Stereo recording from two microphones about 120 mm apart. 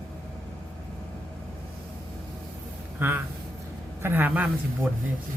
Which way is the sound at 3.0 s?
15° right (ahead or behind).